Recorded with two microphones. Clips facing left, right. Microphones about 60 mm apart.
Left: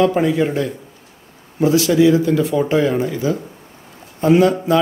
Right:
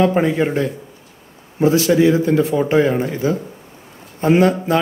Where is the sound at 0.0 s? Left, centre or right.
Right.